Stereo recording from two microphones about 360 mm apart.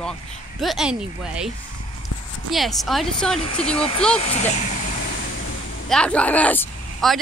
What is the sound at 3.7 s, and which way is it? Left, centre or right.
Speech, centre.